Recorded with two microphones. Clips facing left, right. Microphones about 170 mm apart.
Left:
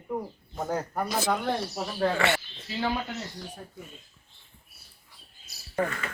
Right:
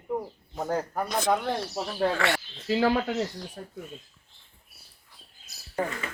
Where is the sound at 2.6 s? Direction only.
90° right.